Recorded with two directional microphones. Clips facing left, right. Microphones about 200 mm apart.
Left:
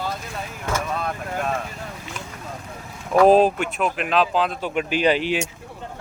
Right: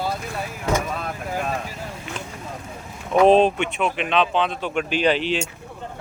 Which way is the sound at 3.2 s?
5° left (ahead or behind).